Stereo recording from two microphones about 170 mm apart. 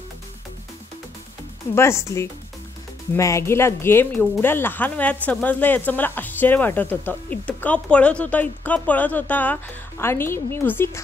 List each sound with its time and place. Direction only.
1.8 s speech: 15° left (ahead or behind)